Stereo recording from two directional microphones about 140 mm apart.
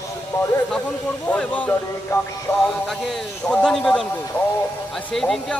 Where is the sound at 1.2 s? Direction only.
10° left (ahead or behind).